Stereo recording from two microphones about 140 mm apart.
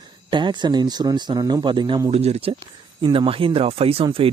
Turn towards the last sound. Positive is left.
turn(degrees=-45)  # may be behind; listen again after turning